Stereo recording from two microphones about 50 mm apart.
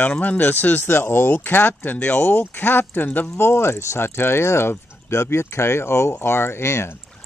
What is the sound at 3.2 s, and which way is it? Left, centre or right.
Speech, left.